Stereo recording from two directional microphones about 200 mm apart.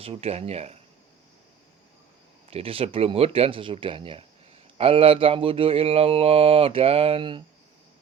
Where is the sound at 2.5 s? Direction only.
30° right (ahead or behind).